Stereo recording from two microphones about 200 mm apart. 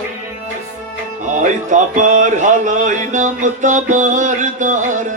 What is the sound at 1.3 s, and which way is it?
Music, 40° right (ahead or behind).